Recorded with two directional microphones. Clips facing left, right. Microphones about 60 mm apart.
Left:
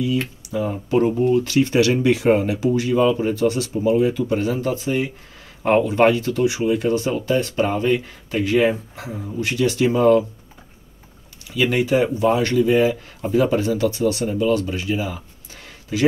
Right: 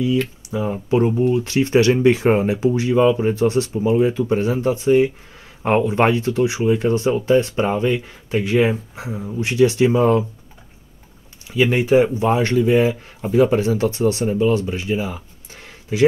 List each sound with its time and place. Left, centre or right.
0.0 s speech: right; by 9.3 s centre
9.4 s speech: right
11.5 s speech: right